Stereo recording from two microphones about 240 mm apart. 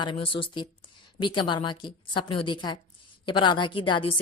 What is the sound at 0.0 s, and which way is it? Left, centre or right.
A woman's voice, left.